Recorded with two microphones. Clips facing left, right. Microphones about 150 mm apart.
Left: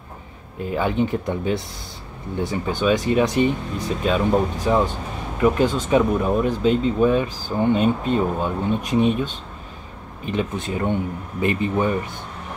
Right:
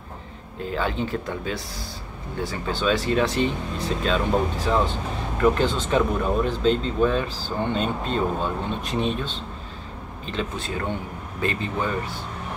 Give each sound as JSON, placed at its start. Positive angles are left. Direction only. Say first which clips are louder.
{"t": 0.7, "sound": "speech", "louder": "left 5 dB", "side_deg": 15}